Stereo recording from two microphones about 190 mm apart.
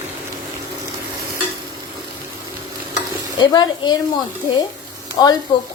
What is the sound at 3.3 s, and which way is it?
Speech, 20° left (ahead or behind).